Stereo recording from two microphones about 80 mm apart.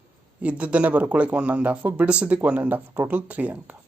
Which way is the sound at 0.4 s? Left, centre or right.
Centre.